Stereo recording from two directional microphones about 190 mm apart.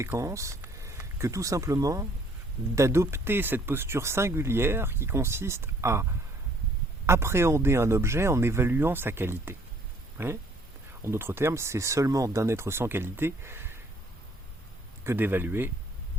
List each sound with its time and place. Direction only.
0.0 s speech: 15° right (ahead or behind)
15.0 s speech: 10° right (ahead or behind)